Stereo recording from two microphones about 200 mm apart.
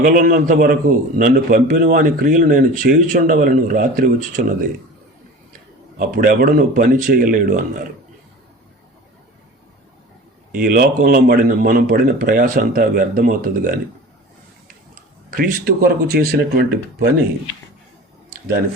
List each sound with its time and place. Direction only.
0.0 s a man's voice: 45° right (ahead or behind)
6.0 s a man's voice: 45° right (ahead or behind)
10.5 s a man's voice: 45° right (ahead or behind)
15.3 s a man's voice: 45° right (ahead or behind)
18.3 s a sound: 50° right (ahead or behind)